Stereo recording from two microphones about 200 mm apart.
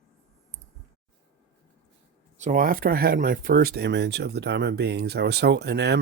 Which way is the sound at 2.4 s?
40° right (ahead or behind).